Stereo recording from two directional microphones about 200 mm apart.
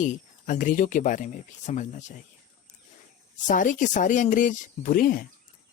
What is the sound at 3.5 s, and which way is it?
Speech, 40° left (ahead or behind).